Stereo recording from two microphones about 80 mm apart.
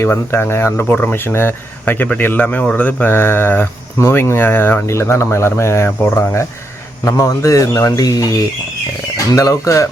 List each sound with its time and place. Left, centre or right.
0.0 s speech: left
7.0 s speech: left
9.1 s speech: left